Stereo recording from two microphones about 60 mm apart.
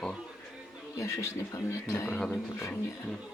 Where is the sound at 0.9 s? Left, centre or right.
Left.